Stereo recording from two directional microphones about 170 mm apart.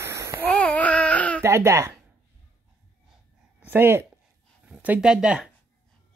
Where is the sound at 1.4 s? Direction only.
15° right (ahead or behind).